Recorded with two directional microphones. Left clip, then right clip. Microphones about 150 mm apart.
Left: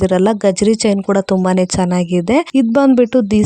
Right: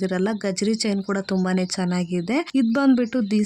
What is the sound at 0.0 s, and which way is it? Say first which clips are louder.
Speech: left 12 dB; 50° left (ahead or behind).